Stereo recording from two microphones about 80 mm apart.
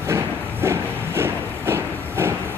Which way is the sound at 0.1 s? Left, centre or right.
Right.